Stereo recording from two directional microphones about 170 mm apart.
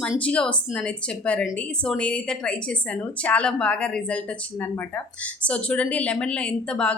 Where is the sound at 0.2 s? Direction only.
5° left (ahead or behind).